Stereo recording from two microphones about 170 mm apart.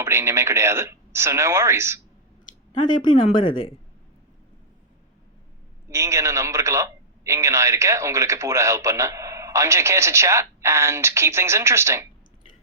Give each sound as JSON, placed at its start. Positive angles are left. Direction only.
{"t": 0.0, "sound": "a man's voice", "side_deg": -15}
{"t": 3.3, "sound": "a woman's voice", "side_deg": 30}
{"t": 5.9, "sound": "a man's voice", "side_deg": -15}